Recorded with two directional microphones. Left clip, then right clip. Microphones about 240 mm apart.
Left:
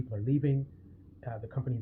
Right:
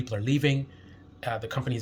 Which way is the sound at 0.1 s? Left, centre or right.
Right.